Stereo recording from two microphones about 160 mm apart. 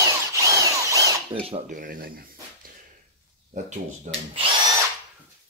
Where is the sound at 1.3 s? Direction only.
35° right (ahead or behind).